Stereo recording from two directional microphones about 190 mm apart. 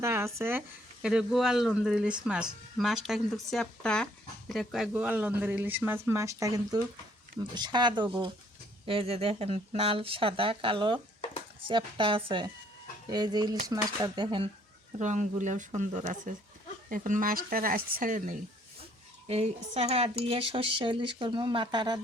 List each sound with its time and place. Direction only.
0.0 s speech: 15° right (ahead or behind)
1.0 s speech: centre (ahead or behind); by 14.5 s 25° right (ahead or behind)
14.9 s speech: 40° right (ahead or behind)
19.3 s speech: 35° right (ahead or behind)